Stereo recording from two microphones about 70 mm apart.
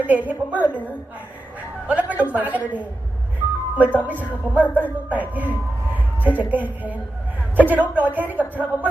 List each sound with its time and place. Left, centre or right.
0.0 s a man's voice: right
1.9 s a woman's voice: right